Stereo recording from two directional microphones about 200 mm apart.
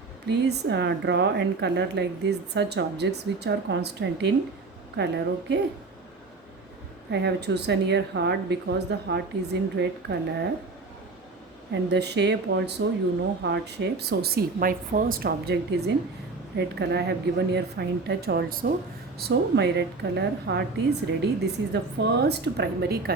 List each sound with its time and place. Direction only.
0.3 s speech: 55° right (ahead or behind)
7.1 s speech: 60° right (ahead or behind)
11.7 s a woman's voice: 55° right (ahead or behind)
19.2 s speech: 60° right (ahead or behind)